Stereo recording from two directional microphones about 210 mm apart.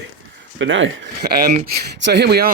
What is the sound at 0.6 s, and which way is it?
Speech, 65° right (ahead or behind).